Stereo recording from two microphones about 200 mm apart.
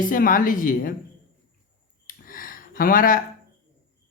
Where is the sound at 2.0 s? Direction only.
45° left (ahead or behind).